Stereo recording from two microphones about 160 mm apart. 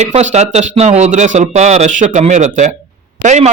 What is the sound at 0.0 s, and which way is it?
A man's voice, 45° right (ahead or behind).